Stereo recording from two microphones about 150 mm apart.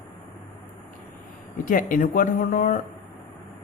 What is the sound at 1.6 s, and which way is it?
Speech, 60° left (ahead or behind).